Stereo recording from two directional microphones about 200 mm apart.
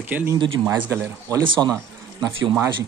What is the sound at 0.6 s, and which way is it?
Speech, 15° right (ahead or behind).